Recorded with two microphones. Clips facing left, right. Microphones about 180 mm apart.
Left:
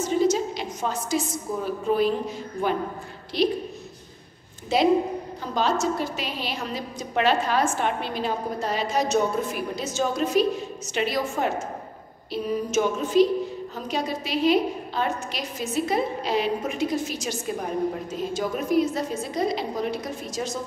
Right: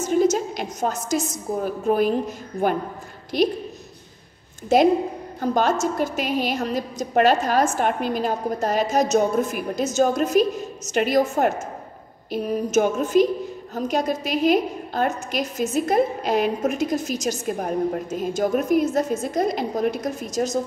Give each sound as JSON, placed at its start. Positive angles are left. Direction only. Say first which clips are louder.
{"t": 0.0, "sound": "a woman's voice", "louder": "right 2 dB", "side_deg": -50}
{"t": 4.7, "sound": "a woman's voice", "louder": "right 3 dB", "side_deg": -45}